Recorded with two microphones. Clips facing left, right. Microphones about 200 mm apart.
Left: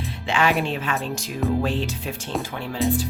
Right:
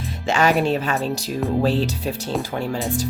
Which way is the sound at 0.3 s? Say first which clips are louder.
Right 4 dB; 40° right (ahead or behind).